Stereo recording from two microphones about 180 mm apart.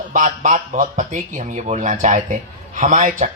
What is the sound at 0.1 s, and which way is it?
Speech, 45° right (ahead or behind).